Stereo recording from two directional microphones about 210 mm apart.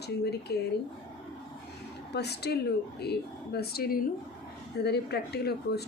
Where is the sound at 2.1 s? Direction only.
50° left (ahead or behind).